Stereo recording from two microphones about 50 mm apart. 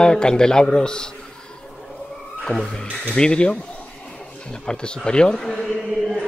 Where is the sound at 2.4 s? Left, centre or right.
Centre.